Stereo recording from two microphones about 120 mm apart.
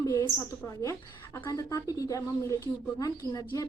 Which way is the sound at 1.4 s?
30° left (ahead or behind).